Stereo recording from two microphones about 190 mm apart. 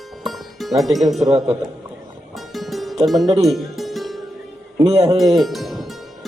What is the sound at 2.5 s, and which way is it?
Music, centre (ahead or behind).